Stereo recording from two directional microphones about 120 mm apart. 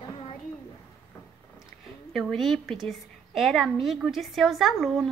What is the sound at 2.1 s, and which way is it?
A woman's voice, centre (ahead or behind).